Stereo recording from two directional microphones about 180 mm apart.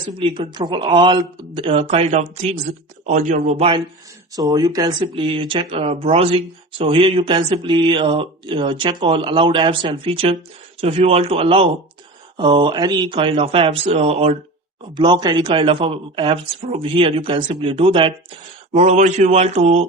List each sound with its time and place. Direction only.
0.2 s speech: 30° right (ahead or behind)
4.4 s speech: 20° right (ahead or behind)
18.7 s speech: 40° right (ahead or behind)